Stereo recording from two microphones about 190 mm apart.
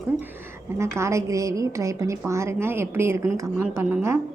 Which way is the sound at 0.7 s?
15° right (ahead or behind).